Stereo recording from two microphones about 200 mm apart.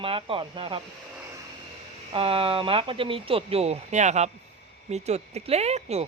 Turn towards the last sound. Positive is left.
turn(degrees=-30)  # may be behind; listen again after turning